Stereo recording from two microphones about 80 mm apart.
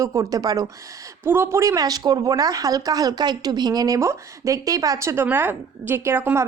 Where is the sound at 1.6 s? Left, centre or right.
Right.